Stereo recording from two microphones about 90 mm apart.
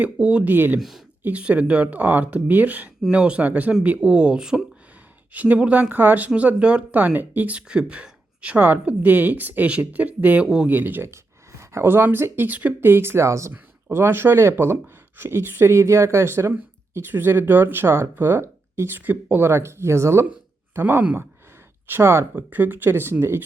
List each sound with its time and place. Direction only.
0.0 s speech: 15° right (ahead or behind)
0.8 s speech: centre (ahead or behind)
1.2 s speech: 15° right (ahead or behind)
10.8 s speech: 20° right (ahead or behind)